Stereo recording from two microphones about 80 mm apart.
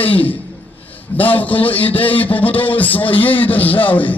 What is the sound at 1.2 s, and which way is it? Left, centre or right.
A man's voice, left.